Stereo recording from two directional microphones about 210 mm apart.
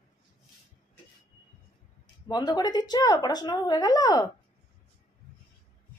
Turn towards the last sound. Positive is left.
turn(degrees=20)  # may be behind; listen again after turning